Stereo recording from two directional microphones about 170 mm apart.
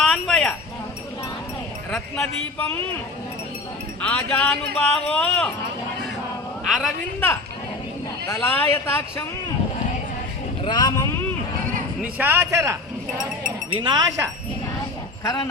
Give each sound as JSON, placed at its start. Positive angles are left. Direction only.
{"t": 0.0, "sound": "a sound", "side_deg": 5}
{"t": 1.9, "sound": "speech", "side_deg": 5}
{"t": 4.0, "sound": "speech", "side_deg": 10}
{"t": 6.7, "sound": "a man's voice", "side_deg": 0}
{"t": 8.3, "sound": "speech", "side_deg": 15}
{"t": 10.6, "sound": "speech", "side_deg": 25}
{"t": 12.1, "sound": "a man's voice", "side_deg": -10}
{"t": 13.7, "sound": "speech", "side_deg": -25}
{"t": 15.2, "sound": "speech", "side_deg": 20}